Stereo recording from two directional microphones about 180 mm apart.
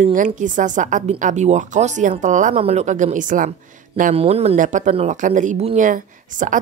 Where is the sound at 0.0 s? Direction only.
45° right (ahead or behind).